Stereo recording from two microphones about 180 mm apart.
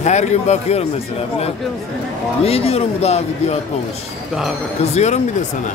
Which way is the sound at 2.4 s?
35° left (ahead or behind).